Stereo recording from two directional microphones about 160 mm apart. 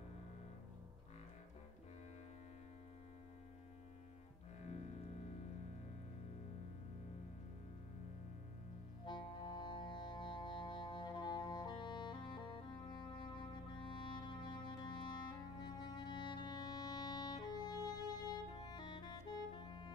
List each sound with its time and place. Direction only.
9.0 s music: 30° left (ahead or behind)